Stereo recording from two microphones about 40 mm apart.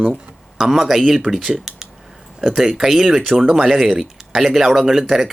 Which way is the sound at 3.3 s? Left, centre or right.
Centre.